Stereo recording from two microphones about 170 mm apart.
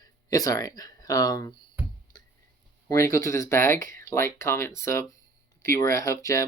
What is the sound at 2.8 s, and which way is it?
Speech, 15° left (ahead or behind).